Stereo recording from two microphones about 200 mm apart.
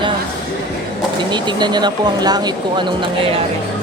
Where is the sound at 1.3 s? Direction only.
20° right (ahead or behind).